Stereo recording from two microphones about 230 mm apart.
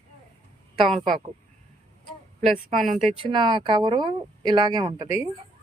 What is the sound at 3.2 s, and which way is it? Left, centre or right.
Speech, right.